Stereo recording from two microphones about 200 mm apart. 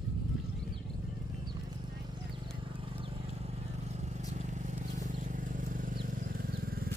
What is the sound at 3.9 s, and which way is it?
Vehicle, 35° right (ahead or behind).